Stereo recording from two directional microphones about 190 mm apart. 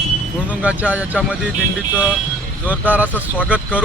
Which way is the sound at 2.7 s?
10° right (ahead or behind).